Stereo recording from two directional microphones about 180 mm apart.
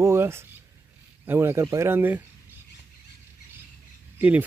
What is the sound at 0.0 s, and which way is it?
Speech, 15° right (ahead or behind).